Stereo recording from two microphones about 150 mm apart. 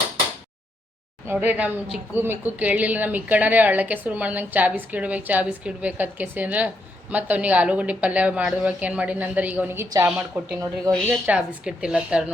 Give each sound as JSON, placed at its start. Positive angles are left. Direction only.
{"t": 1.3, "sound": "a woman's voice", "side_deg": -10}
{"t": 10.9, "sound": "a woman's voice", "side_deg": -25}
{"t": 11.3, "sound": "a woman's voice", "side_deg": -5}